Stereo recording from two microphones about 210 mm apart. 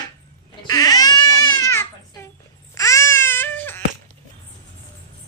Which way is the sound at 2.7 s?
15° left (ahead or behind).